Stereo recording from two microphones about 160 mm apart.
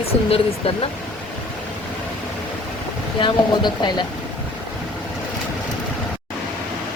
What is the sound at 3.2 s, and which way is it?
Speech, 30° left (ahead or behind).